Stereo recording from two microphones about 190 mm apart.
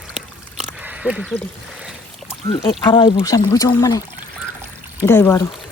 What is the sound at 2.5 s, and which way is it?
Speech, 25° left (ahead or behind).